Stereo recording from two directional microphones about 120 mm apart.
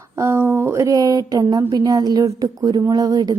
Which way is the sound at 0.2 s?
20° right (ahead or behind).